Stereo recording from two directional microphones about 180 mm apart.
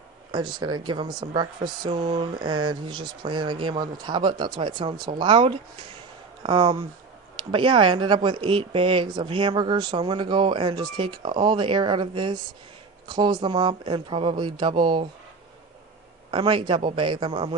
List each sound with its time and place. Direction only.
0.3 s speech: 25° right (ahead or behind)
16.3 s speech: 30° right (ahead or behind)